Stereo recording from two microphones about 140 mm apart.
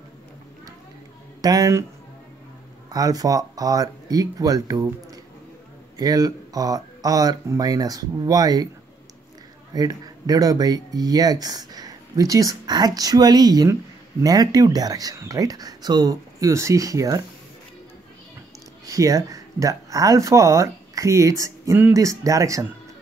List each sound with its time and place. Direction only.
1.4 s speech: 25° right (ahead or behind)
2.9 s speech: 25° right (ahead or behind)
9.8 s speech: 25° right (ahead or behind)
18.9 s speech: 25° right (ahead or behind)